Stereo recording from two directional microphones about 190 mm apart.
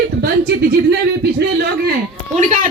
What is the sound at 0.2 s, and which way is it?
Speech, 60° right (ahead or behind).